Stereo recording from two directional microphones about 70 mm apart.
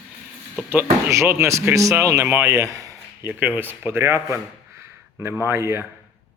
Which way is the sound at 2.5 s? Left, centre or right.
Right.